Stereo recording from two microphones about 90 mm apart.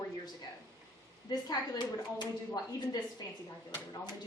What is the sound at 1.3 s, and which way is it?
Speech, 50° left (ahead or behind).